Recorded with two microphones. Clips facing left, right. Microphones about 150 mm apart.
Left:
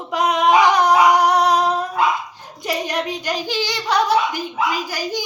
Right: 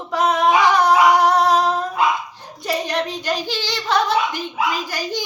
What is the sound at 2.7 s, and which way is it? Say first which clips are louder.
A child's voice: even; 15° left (ahead or behind).